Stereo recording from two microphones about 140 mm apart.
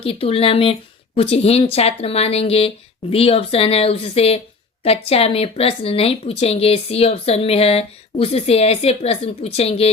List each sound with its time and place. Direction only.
0.0 s speech: 45° left (ahead or behind)